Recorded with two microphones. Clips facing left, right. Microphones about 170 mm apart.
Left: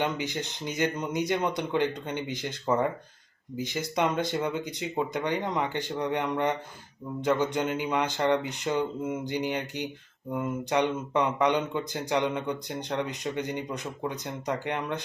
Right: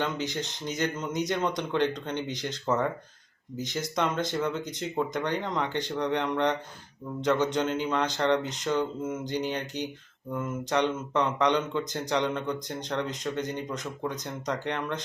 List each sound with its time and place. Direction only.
0.0 s speech: 10° left (ahead or behind)